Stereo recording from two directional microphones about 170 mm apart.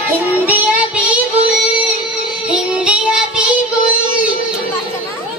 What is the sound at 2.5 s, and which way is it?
Child singing, 5° right (ahead or behind).